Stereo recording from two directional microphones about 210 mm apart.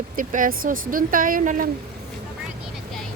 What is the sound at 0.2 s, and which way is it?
Speech, 40° right (ahead or behind).